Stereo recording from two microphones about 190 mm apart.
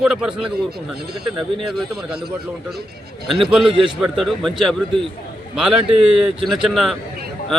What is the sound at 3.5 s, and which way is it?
A man's voice, 5° right (ahead or behind).